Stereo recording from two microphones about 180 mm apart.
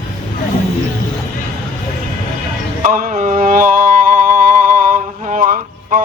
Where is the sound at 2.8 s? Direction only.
50° right (ahead or behind).